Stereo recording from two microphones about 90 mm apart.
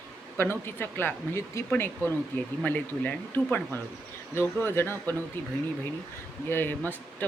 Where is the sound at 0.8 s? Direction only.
25° left (ahead or behind).